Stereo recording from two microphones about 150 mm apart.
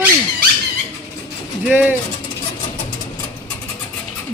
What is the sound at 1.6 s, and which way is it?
Speech, 10° right (ahead or behind).